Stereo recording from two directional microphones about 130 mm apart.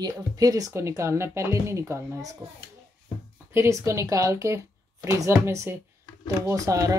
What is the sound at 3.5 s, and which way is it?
Speech, 20° right (ahead or behind).